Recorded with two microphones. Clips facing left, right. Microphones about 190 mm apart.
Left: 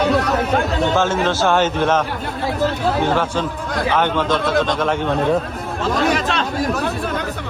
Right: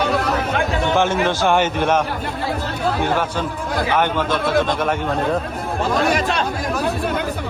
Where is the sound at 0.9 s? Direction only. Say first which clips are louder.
Right 2 dB; 15° right (ahead or behind).